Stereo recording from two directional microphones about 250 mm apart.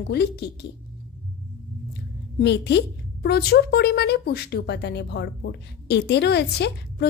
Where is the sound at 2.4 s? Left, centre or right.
Left.